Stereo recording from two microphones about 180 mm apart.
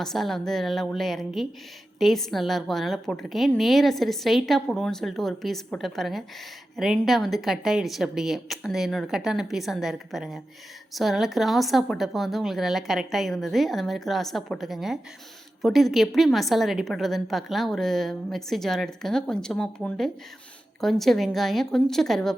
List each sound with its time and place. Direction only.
0.0 s a woman's voice: centre (ahead or behind)